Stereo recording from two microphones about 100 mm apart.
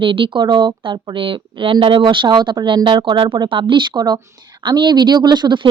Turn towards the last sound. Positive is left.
turn(degrees=-50)  # may be behind; listen again after turning